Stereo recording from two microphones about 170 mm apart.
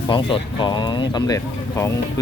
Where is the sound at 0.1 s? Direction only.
30° left (ahead or behind).